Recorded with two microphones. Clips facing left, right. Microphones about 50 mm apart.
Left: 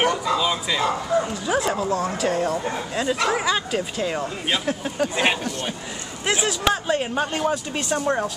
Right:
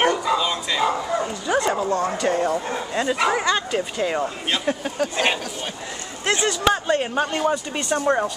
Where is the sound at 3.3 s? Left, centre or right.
Centre.